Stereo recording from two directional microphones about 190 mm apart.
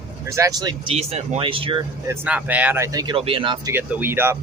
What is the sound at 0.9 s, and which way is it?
Speech, 35° right (ahead or behind).